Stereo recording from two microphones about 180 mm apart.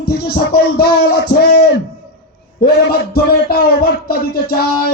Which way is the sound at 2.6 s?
55° left (ahead or behind).